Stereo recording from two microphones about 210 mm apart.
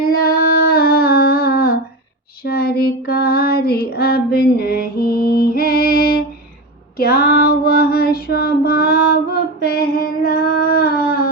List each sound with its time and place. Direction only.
0.0 s a sound: 45° left (ahead or behind)
2.4 s child singing: 45° left (ahead or behind)
7.0 s female singing: 45° left (ahead or behind)